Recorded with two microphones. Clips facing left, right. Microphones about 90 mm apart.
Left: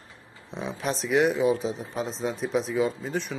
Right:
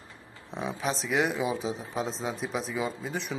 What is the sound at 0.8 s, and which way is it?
Speech, centre (ahead or behind).